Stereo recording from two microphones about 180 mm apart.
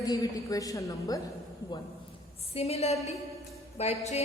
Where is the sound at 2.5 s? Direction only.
35° left (ahead or behind).